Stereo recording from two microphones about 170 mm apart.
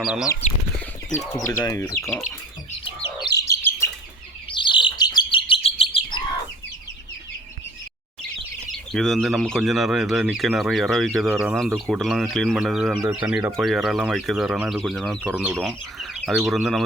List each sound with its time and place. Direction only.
0.0 s speech: 5° right (ahead or behind)
1.2 s speech: 15° left (ahead or behind)
2.0 s speech: centre (ahead or behind)
3.2 s bird: 20° left (ahead or behind)
4.5 s bird: 30° left (ahead or behind)
8.7 s speech: centre (ahead or behind)